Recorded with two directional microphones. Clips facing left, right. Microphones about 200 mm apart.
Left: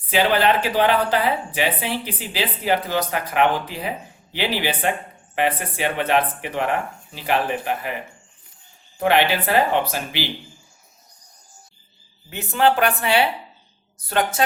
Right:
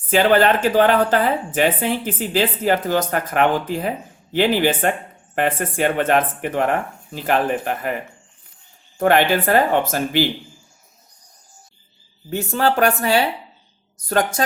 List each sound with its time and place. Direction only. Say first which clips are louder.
0.1 s a woman's voice: right 3 dB; 45° right (ahead or behind)
9.0 s a woman's voice: right 3 dB; 50° right (ahead or behind)
12.3 s a woman's voice: even; 40° right (ahead or behind)